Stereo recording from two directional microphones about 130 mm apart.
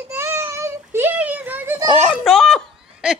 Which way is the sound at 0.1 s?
20° right (ahead or behind).